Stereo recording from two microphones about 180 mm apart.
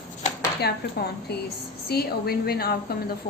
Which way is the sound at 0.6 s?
60° left (ahead or behind).